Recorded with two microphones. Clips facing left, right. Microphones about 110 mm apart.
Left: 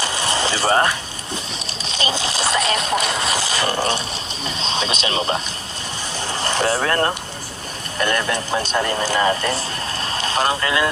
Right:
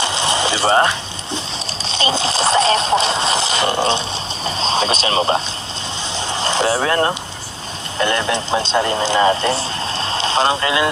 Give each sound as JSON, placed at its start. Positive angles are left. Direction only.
{"t": 0.0, "sound": "vehicle", "side_deg": -20}
{"t": 1.9, "sound": "a sound", "side_deg": -30}
{"t": 4.4, "sound": "speech", "side_deg": -35}
{"t": 6.1, "sound": "speech", "side_deg": -20}
{"t": 10.0, "sound": "vehicle", "side_deg": -25}